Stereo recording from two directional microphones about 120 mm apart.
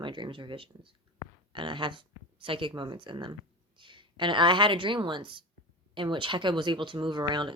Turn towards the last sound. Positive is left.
turn(degrees=-40)  # may be behind; listen again after turning